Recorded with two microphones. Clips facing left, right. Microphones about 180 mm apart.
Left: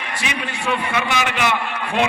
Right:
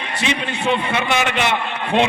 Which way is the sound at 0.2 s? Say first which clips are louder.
Right 6 dB; 25° right (ahead or behind).